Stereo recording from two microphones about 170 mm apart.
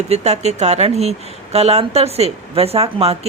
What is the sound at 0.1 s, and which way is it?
A woman's voice, 40° right (ahead or behind).